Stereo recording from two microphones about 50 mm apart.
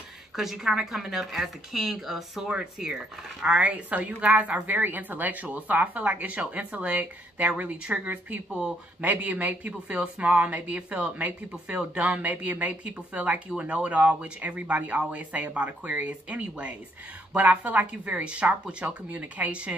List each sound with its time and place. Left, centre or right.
0.4 s speech: centre
2.5 s a woman's voice: centre; by 18.2 s right
18.2 s speech: right
19.0 s a woman's voice: right